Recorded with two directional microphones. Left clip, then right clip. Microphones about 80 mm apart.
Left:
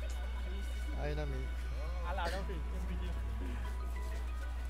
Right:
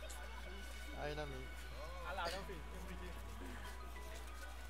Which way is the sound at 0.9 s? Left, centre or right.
Centre.